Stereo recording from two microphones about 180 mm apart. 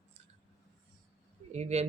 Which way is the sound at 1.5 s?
35° right (ahead or behind).